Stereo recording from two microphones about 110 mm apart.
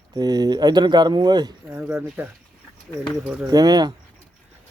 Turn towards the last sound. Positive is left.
turn(degrees=-35)  # may be behind; listen again after turning